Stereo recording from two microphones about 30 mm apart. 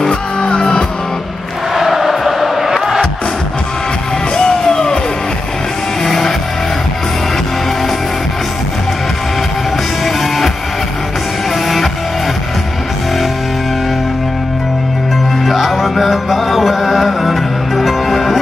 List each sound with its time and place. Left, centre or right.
0.1 s music: left
1.7 s chant: centre
4.4 s music: left
6.0 s music: centre
10.0 s music: centre
15.4 s music: centre